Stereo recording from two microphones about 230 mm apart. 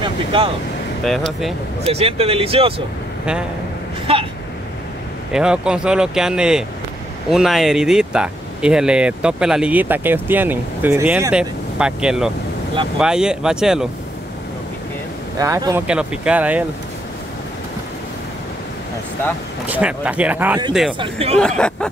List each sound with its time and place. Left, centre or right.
0.0 s vehicle: right
1.0 s speech: centre
1.9 s speech: right
5.3 s speech: centre
15.3 s speech: centre
19.7 s speech: centre
21.0 s speech: right
21.4 s speech: centre